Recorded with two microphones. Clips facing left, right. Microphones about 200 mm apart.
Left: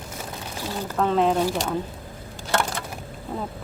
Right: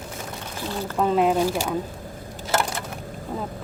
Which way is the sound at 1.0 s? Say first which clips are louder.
Right 1 dB; 10° right (ahead or behind).